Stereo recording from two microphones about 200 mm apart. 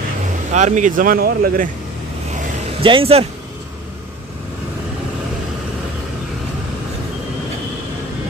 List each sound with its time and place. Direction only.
0.5 s speech: 35° right (ahead or behind)
2.8 s speech: 25° right (ahead or behind)